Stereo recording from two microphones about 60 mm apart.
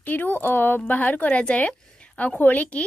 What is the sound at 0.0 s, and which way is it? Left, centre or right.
Speech, left.